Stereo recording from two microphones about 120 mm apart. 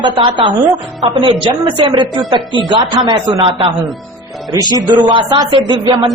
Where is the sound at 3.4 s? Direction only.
50° right (ahead or behind).